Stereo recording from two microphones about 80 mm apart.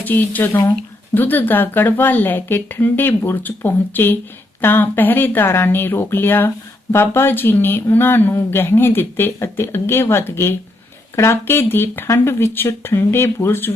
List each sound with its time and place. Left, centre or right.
0.0 s speech: left